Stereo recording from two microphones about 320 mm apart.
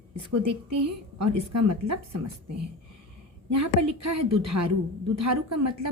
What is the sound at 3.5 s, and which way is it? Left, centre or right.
A woman's voice, right.